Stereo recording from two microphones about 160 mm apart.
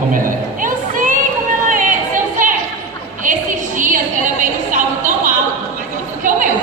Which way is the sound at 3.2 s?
55° right (ahead or behind).